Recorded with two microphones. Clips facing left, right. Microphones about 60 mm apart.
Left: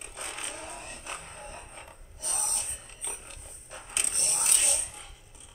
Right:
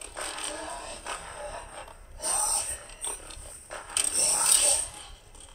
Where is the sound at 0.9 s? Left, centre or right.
Right.